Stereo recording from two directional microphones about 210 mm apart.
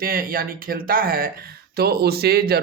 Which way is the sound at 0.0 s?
45° right (ahead or behind).